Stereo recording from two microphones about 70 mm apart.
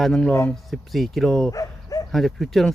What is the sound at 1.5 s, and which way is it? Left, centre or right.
Dog, left.